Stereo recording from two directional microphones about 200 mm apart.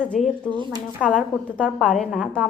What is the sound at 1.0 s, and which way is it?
A woman's voice, 5° left (ahead or behind).